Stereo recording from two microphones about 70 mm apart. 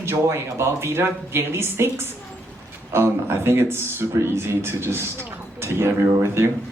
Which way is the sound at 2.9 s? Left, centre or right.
Right.